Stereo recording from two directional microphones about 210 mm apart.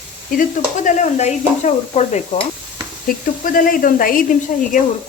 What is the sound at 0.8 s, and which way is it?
Stir, 35° left (ahead or behind).